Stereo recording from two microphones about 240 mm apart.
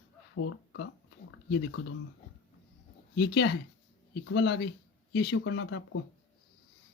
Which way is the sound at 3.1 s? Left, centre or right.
Left.